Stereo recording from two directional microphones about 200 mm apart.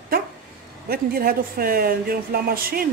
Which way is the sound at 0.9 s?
50° right (ahead or behind).